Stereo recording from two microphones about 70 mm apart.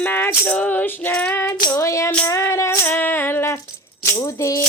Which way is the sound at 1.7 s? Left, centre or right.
Left.